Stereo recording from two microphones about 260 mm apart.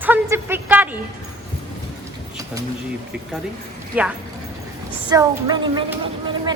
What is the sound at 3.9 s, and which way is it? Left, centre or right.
Speech, centre.